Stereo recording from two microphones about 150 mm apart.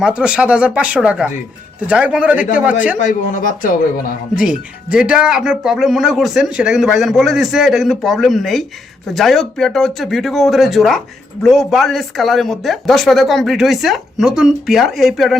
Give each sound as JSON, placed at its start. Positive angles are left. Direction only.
{"t": 0.0, "sound": "speech", "side_deg": -5}
{"t": 3.0, "sound": "speech", "side_deg": 60}
{"t": 4.4, "sound": "speech", "side_deg": -5}